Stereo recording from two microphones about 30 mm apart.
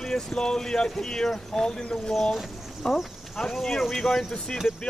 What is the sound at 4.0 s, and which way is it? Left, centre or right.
Speech, centre.